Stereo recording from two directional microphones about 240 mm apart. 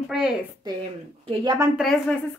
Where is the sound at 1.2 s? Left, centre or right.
Centre.